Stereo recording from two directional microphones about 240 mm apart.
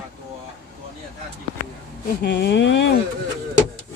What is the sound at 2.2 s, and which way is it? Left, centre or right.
Speech, left.